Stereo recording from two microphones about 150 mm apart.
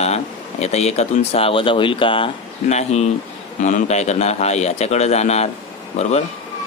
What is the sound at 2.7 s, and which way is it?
Speech, 50° left (ahead or behind).